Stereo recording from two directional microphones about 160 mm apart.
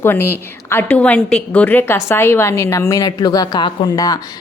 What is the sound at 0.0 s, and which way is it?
A woman's voice, 15° left (ahead or behind).